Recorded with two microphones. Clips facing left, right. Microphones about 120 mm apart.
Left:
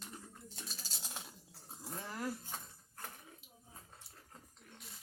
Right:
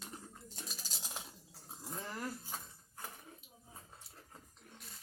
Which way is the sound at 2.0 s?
10° left (ahead or behind).